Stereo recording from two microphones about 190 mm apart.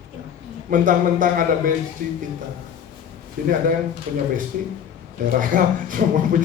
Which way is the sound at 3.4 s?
45° right (ahead or behind).